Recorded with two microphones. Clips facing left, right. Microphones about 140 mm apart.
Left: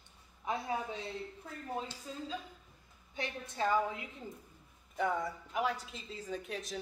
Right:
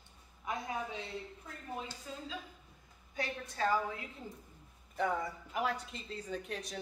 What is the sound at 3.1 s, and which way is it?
Speech, 20° left (ahead or behind).